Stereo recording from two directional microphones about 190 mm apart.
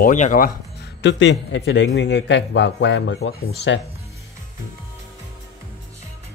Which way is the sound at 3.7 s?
85° left.